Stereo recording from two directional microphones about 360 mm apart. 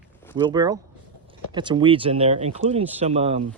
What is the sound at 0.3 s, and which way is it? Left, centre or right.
Speech, centre.